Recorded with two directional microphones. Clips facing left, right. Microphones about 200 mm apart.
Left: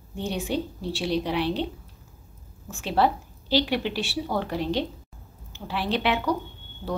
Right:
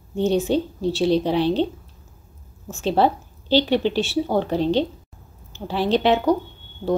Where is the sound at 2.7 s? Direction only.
25° right (ahead or behind).